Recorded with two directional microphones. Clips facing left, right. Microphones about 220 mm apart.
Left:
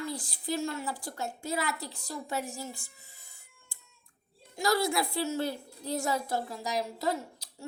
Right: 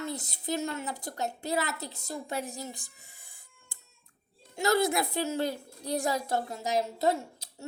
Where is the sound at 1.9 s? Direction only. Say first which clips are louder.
Right 2 dB; 45° right (ahead or behind).